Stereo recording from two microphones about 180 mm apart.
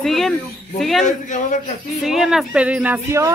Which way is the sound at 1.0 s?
45° left (ahead or behind).